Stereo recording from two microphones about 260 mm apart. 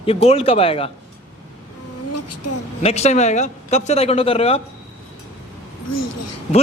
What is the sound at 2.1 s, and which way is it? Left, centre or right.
Vehicle, left.